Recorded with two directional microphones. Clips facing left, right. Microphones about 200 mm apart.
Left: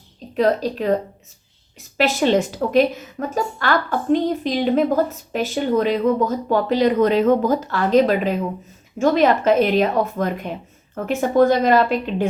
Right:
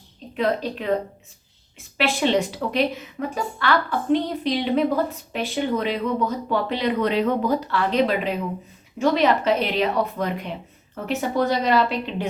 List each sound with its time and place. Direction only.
0.3 s a woman's voice: 40° left (ahead or behind)
2.0 s a woman's voice: 40° left (ahead or behind)